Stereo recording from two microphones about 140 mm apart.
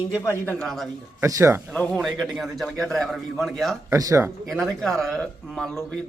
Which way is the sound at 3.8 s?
20° right (ahead or behind).